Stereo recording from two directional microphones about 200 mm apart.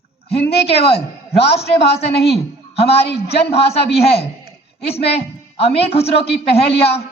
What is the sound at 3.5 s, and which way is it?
A man's voice, 30° left (ahead or behind).